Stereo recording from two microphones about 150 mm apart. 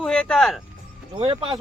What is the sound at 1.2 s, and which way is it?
Speech, 35° right (ahead or behind).